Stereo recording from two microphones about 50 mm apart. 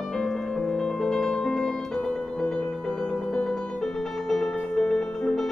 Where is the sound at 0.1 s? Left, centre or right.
Centre.